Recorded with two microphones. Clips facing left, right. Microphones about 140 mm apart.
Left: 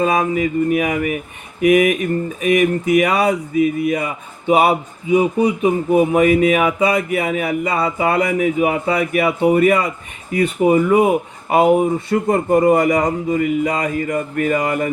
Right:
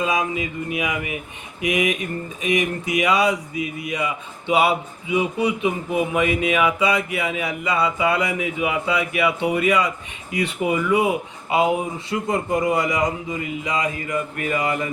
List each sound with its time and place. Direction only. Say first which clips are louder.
0.0 s speech: left 6 dB; 50° left (ahead or behind)